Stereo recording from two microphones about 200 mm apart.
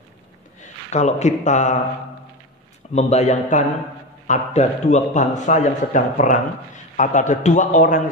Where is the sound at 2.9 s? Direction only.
35° left (ahead or behind).